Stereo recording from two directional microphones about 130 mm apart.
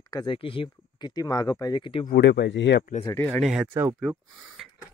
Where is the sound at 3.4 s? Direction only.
5° right (ahead or behind).